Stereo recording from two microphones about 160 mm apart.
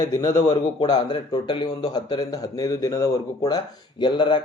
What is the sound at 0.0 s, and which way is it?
A man's voice, 20° left (ahead or behind).